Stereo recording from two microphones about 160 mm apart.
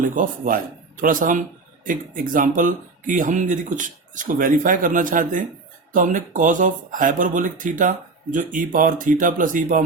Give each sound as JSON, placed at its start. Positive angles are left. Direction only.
{"t": 0.0, "sound": "speech", "side_deg": -55}